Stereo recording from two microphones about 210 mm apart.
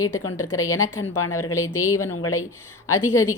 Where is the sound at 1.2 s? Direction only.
90° left.